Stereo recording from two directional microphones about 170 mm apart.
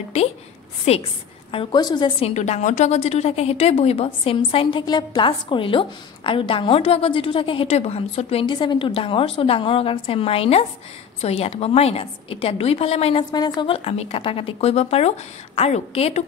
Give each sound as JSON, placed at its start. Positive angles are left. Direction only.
{"t": 0.1, "sound": "a woman's voice", "side_deg": 40}
{"t": 1.5, "sound": "a woman's voice", "side_deg": 30}
{"t": 13.2, "sound": "a woman's voice", "side_deg": 25}